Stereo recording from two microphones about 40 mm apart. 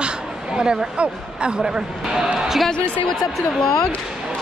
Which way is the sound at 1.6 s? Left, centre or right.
Centre.